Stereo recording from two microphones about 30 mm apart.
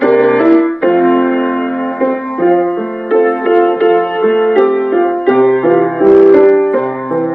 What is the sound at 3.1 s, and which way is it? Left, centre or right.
Music, left.